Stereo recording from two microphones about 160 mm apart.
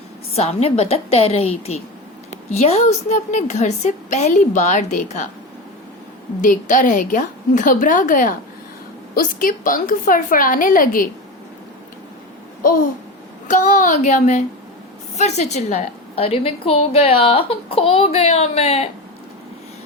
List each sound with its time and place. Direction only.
0.3 s a woman's voice: 40° left (ahead or behind)
6.4 s a woman's voice: 55° left (ahead or behind)
13.5 s a woman's voice: 50° left (ahead or behind)